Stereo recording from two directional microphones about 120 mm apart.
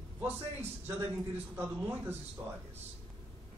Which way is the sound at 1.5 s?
20° right (ahead or behind).